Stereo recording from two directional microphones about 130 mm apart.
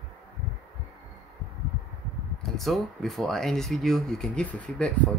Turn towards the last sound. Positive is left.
turn(degrees=10)  # may be behind; listen again after turning